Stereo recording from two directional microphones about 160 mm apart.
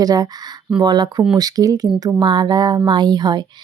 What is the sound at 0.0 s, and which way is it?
Speech, 25° right (ahead or behind).